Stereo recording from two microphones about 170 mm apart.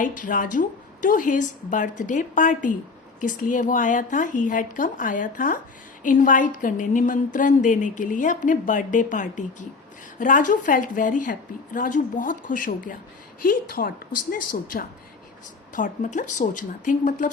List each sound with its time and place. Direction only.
0.0 s a woman's voice: 50° left (ahead or behind)